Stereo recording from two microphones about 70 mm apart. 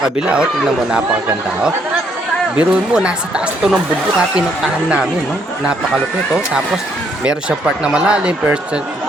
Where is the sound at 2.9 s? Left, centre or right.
Centre.